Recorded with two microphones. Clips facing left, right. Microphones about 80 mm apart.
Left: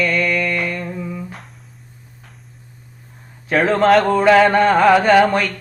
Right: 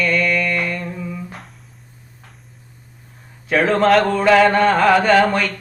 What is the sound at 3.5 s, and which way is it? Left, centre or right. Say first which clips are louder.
Speech: left 1 dB; centre.